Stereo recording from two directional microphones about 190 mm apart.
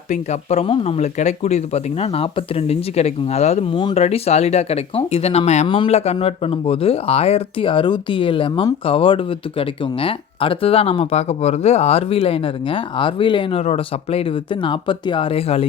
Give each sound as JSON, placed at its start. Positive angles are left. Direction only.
{"t": 0.1, "sound": "speech", "side_deg": 35}